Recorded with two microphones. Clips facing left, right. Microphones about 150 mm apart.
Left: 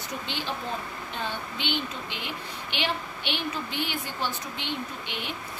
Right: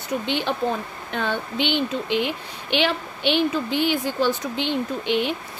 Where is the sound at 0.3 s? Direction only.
65° right (ahead or behind).